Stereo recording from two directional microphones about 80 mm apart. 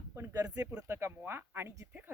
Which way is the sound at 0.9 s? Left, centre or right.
Right.